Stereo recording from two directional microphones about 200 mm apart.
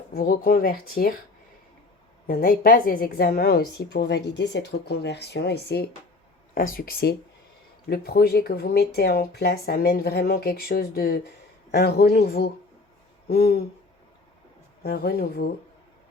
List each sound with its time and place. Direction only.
0.1 s speech: 50° left (ahead or behind)
2.2 s speech: 50° left (ahead or behind)
14.8 s speech: 50° left (ahead or behind)